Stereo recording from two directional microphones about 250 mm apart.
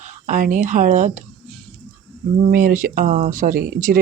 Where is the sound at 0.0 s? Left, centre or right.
Right.